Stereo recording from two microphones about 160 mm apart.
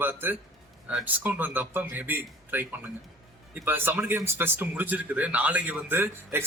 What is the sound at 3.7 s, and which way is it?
Speech, 10° right (ahead or behind).